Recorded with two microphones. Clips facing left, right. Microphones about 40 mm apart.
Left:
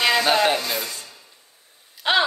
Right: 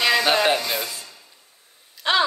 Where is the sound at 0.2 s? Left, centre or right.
Centre.